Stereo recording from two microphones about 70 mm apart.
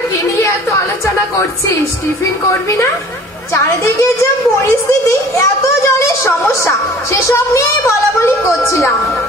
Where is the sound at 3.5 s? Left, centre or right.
Left.